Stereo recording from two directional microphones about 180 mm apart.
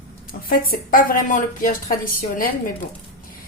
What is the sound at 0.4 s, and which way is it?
Speech, 50° left (ahead or behind).